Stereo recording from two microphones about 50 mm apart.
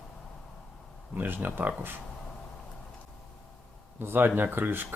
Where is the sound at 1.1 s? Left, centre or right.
Right.